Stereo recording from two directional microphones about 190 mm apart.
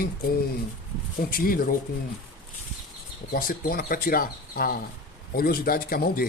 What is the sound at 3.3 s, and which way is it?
A man's voice, 50° left (ahead or behind).